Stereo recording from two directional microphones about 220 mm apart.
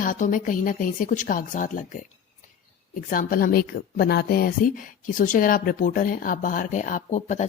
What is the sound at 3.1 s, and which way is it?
A woman's voice, 40° left (ahead or behind).